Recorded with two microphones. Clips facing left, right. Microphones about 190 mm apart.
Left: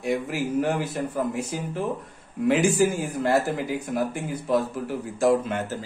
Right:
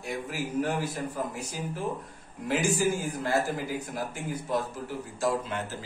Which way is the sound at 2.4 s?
65° left (ahead or behind).